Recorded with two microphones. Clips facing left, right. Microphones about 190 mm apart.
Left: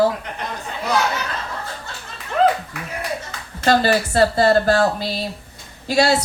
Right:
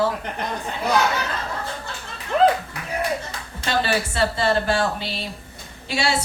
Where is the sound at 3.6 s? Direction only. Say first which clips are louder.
Left 6 dB; 40° left (ahead or behind).